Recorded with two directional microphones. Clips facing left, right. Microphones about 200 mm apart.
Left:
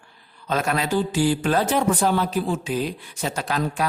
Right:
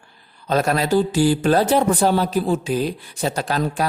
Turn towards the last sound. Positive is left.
turn(degrees=-35)  # may be behind; listen again after turning